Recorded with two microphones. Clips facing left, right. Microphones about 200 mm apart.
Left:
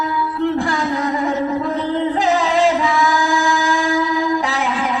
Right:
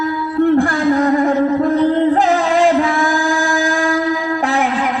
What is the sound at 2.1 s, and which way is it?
Music, 55° right (ahead or behind).